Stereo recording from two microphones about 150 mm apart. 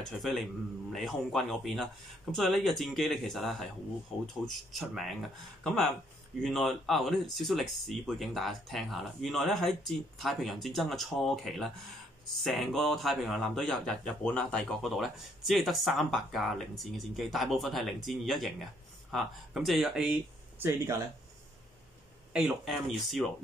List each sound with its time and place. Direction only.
0.2 s speech: centre (ahead or behind)
20.6 s speech: 15° right (ahead or behind)
22.3 s speech: centre (ahead or behind)